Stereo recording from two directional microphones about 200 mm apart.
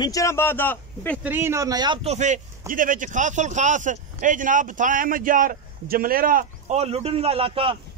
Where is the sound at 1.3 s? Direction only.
10° right (ahead or behind); by 7.8 s 30° right (ahead or behind).